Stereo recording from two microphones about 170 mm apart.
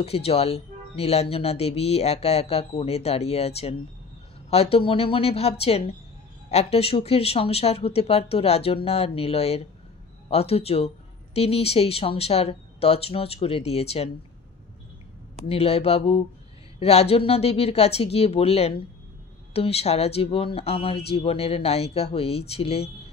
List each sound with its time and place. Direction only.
0.0 s speech: 35° left (ahead or behind)
15.4 s speech: 35° left (ahead or behind)